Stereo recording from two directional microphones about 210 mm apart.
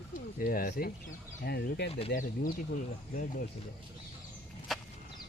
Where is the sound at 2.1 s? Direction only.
40° left (ahead or behind).